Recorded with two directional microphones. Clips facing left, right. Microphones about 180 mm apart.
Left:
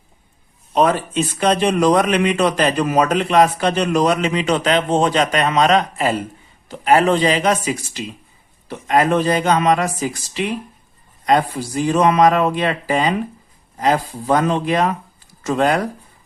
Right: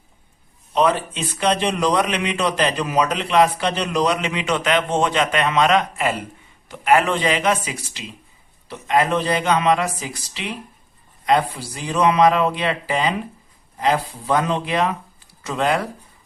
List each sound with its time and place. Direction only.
0.7 s a man's voice: 45° left (ahead or behind)